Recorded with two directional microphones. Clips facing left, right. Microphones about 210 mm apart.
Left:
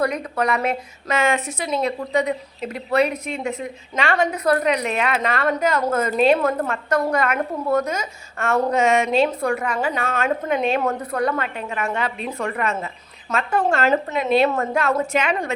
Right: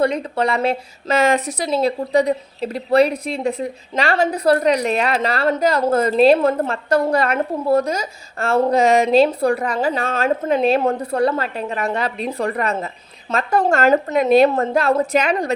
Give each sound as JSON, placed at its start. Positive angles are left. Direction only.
{"t": 0.0, "sound": "a woman's voice", "side_deg": -30}